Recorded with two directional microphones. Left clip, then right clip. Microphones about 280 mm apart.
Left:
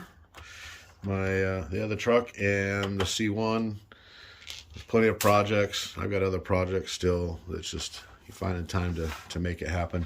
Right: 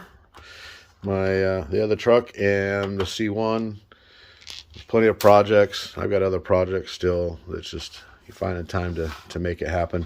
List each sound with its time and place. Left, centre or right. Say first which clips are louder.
0.4 s speech: right 3 dB; right